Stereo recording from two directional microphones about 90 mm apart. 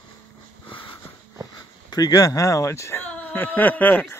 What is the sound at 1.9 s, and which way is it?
Speech, 45° left (ahead or behind).